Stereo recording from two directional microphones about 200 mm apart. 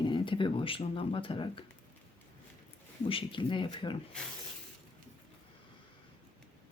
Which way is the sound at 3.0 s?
25° left (ahead or behind).